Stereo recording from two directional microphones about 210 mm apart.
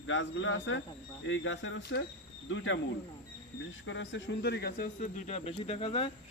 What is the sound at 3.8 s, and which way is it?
Speech, 60° left (ahead or behind).